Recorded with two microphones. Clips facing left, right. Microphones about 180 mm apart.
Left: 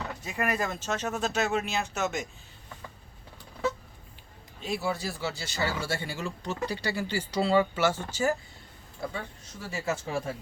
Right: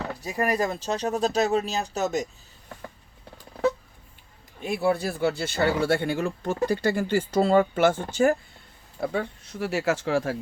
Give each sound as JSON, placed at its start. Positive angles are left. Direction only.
{"t": 0.1, "sound": "speech", "side_deg": -35}
{"t": 4.6, "sound": "speech", "side_deg": -55}